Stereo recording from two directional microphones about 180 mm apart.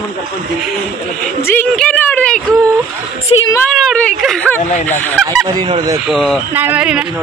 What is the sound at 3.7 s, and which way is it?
Speech, 5° left (ahead or behind).